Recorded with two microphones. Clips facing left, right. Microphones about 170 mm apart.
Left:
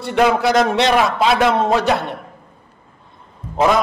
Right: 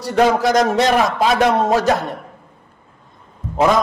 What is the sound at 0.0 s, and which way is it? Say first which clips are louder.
A man's voice: right 1 dB; 40° right (ahead or behind).